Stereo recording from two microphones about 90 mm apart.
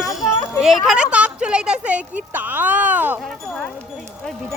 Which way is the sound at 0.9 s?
10° right (ahead or behind).